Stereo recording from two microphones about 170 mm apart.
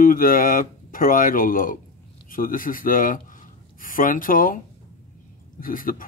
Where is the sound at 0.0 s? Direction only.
55° left (ahead or behind).